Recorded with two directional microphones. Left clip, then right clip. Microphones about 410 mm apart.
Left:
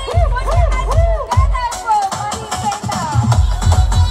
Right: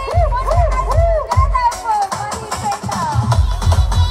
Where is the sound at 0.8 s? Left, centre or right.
Right.